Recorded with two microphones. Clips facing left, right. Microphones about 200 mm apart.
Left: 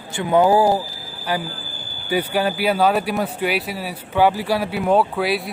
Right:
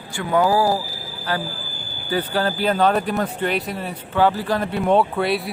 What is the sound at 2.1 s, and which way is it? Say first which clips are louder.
Speech: left 1 dB; 10° left (ahead or behind).